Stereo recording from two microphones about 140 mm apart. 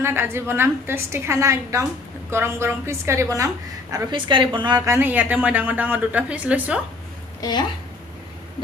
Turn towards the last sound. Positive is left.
turn(degrees=30)  # may be behind; listen again after turning